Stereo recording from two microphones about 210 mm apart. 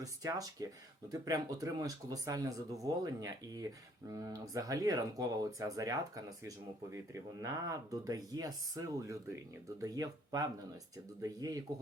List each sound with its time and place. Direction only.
0.0 s speech: 15° right (ahead or behind)